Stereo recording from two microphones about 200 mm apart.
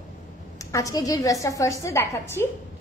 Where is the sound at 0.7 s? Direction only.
15° left (ahead or behind).